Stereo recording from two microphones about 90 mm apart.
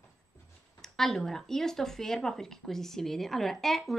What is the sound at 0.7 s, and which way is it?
A woman's voice, 5° left (ahead or behind).